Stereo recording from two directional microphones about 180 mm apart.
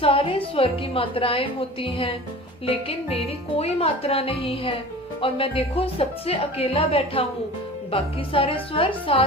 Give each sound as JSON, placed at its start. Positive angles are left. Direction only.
{"t": 0.0, "sound": "a woman's voice", "side_deg": 30}
{"t": 3.6, "sound": "a woman's voice", "side_deg": 35}